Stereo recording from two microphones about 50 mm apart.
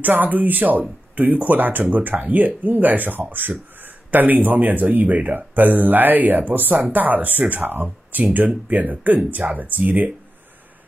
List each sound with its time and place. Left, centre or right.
0.0 s speech: right